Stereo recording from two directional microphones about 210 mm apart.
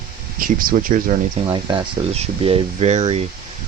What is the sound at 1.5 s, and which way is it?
Speech, 20° right (ahead or behind).